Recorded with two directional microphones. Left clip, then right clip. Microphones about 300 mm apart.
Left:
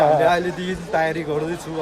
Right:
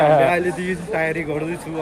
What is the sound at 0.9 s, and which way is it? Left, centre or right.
Speech, centre.